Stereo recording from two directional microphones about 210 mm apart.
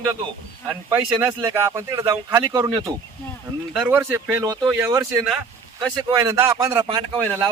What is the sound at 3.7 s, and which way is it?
Speech, 5° right (ahead or behind).